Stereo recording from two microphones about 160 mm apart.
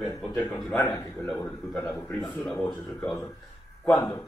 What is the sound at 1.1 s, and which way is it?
Speech, 5° left (ahead or behind).